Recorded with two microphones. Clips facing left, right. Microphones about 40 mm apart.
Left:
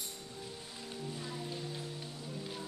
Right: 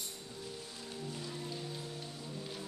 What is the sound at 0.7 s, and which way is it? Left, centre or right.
Music, centre.